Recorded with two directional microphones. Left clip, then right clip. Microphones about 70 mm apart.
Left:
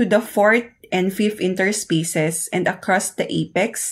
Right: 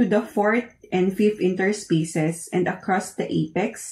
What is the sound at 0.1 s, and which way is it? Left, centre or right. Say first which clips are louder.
Speech: left 5 dB; left.